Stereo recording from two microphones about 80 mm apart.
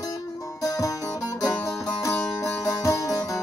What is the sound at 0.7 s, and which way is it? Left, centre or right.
Music, left.